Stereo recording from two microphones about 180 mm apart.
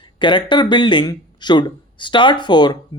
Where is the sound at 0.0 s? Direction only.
25° left (ahead or behind).